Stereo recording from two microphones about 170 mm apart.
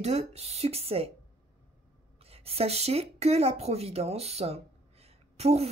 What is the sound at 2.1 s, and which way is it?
A woman's voice, 35° right (ahead or behind).